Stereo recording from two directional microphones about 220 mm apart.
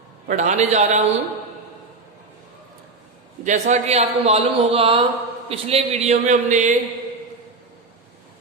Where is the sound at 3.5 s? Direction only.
30° right (ahead or behind).